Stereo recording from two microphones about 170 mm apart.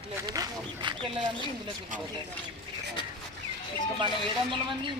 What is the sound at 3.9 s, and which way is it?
Speech, 30° right (ahead or behind).